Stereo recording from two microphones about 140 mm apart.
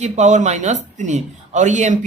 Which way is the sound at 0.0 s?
55° right (ahead or behind).